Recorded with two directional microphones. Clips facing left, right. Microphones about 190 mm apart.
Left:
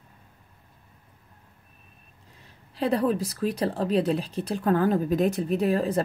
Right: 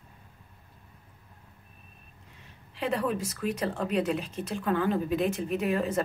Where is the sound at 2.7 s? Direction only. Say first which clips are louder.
Left 5 dB; 35° left (ahead or behind).